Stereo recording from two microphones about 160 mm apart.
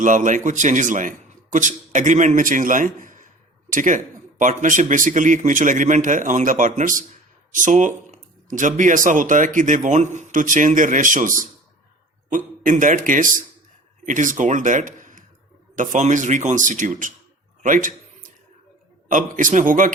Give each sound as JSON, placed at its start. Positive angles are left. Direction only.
{"t": 0.0, "sound": "a man's voice", "side_deg": -50}
{"t": 17.6, "sound": "a sound", "side_deg": -55}
{"t": 19.0, "sound": "a man's voice", "side_deg": -55}